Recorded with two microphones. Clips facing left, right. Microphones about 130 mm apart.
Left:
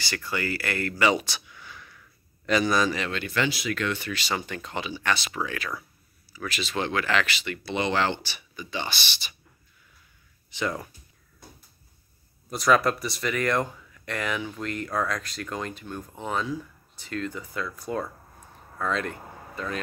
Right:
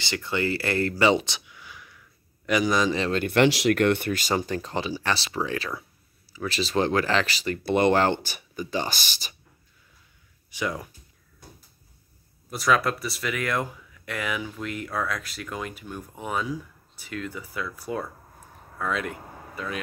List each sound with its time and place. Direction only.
0.0 s speech: 20° right (ahead or behind)
3.0 s speech: 40° right (ahead or behind)
3.3 s speech: 70° right (ahead or behind); by 7.6 s 35° right (ahead or behind)
7.6 s speech: 50° right (ahead or behind)
10.5 s speech: 10° right (ahead or behind)
12.4 s speech: centre (ahead or behind)